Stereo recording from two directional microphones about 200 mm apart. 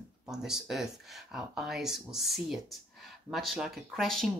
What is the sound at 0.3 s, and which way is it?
Speech, centre (ahead or behind).